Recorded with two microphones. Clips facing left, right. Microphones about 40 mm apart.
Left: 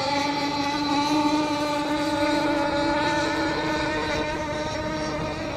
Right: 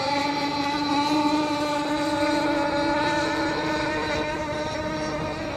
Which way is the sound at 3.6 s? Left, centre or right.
Centre.